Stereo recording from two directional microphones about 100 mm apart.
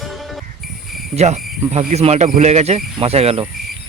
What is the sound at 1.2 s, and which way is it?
Speech, 90° right.